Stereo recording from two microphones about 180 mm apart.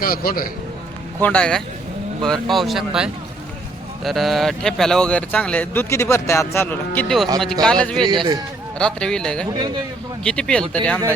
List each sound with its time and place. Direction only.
0.0 s a man's voice: 55° left (ahead or behind)
1.2 s speech: 5° left (ahead or behind)
8.1 s a man's voice: 25° right (ahead or behind)
8.8 s speech: 5° left (ahead or behind)